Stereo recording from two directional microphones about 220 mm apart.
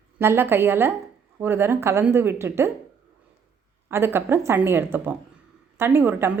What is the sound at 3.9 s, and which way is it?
A woman's voice, 10° right (ahead or behind).